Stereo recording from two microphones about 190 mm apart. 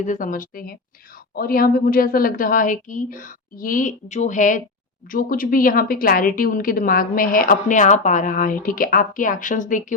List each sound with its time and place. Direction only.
0.0 s a woman's voice: 45° left (ahead or behind)